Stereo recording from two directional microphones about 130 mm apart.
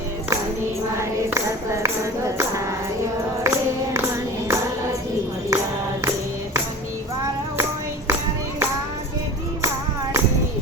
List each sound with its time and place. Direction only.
0.9 s tambourine: 20° right (ahead or behind)
3.4 s music: 20° right (ahead or behind)